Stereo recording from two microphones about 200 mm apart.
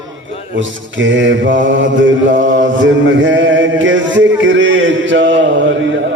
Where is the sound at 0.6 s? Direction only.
70° right (ahead or behind).